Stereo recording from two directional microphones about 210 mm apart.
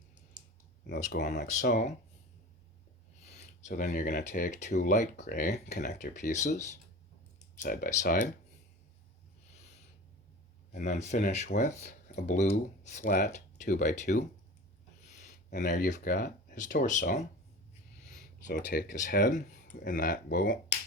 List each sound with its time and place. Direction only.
0.9 s speech: 40° left (ahead or behind)
3.6 s speech: 35° left (ahead or behind)
3.8 s speech: 45° left (ahead or behind)
10.7 s speech: 35° left (ahead or behind)
15.0 s a sound: 35° left (ahead or behind)
15.4 s speech: 40° left (ahead or behind)
18.7 s speech: 40° left (ahead or behind)